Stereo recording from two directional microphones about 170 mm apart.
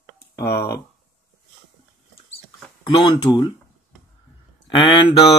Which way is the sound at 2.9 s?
30° left (ahead or behind).